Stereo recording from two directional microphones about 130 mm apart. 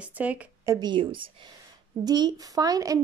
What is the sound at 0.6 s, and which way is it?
Speech, 30° right (ahead or behind).